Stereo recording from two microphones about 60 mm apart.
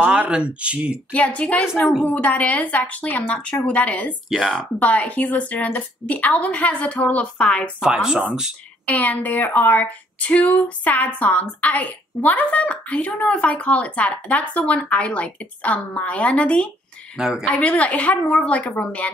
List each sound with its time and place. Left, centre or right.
0.0 s speech: centre
1.1 s speech: left
7.8 s speech: centre
8.8 s speech: left
17.2 s speech: centre
17.5 s speech: left